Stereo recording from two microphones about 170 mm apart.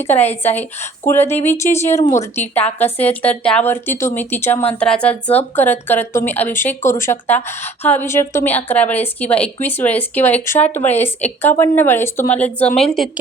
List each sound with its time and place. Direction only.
0.0 s a woman's voice: 10° left (ahead or behind)